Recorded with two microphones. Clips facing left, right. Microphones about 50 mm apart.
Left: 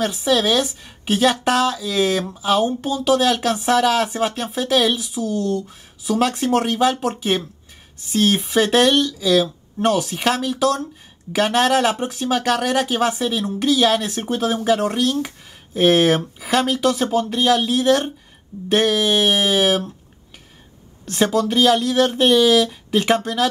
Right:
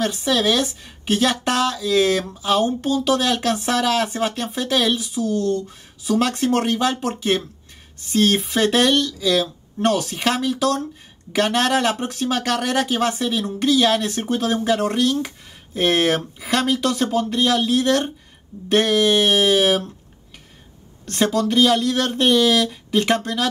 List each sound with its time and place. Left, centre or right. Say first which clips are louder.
0.0 s a woman's voice: left 1 dB; centre
21.0 s a woman's voice: left 1 dB; centre